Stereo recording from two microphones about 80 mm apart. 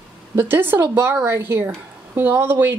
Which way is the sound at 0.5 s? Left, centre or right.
Right.